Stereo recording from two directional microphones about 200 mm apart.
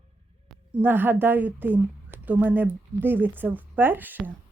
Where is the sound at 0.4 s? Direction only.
10° right (ahead or behind).